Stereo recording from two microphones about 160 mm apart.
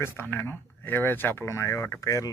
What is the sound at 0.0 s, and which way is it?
Speech, 15° left (ahead or behind).